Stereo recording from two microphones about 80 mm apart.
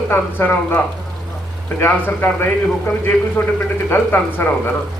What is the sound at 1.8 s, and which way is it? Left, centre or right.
Speech, left.